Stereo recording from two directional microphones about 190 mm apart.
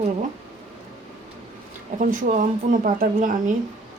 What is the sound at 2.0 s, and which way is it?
Speech, 45° right (ahead or behind).